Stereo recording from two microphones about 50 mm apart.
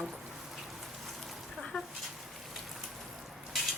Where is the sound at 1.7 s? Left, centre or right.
Centre.